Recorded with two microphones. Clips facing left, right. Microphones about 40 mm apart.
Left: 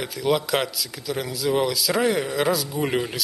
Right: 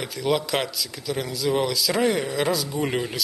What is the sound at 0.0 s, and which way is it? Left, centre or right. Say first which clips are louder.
Speech: left 1 dB; centre.